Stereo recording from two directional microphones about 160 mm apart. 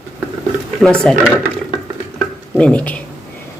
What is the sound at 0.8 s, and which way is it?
Speech, 5° left (ahead or behind).